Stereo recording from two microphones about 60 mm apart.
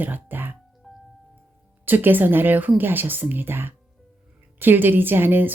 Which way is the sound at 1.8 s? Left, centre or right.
Right.